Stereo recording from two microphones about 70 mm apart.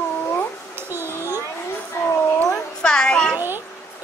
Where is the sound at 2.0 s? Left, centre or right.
Left.